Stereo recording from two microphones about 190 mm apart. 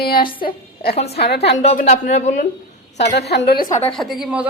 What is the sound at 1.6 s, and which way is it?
Speech, 35° left (ahead or behind).